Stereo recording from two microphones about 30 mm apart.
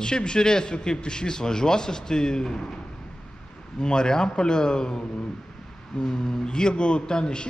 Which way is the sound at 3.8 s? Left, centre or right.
Left.